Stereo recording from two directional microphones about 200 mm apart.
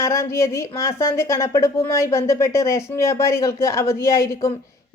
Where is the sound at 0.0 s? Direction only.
15° left (ahead or behind).